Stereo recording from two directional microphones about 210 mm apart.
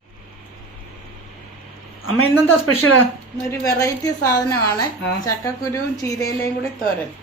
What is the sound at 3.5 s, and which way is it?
A woman's voice, 15° left (ahead or behind).